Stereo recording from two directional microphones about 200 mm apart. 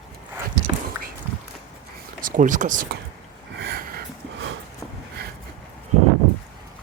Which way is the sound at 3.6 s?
55° right (ahead or behind).